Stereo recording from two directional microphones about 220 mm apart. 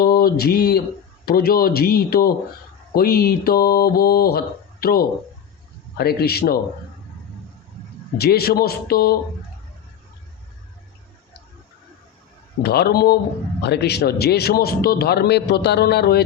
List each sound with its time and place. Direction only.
0.0 s a man's voice: 45° left (ahead or behind)
8.2 s a man's voice: 45° left (ahead or behind)
12.6 s a man's voice: 45° left (ahead or behind)